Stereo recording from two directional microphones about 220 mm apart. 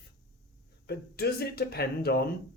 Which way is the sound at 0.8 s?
45° left (ahead or behind).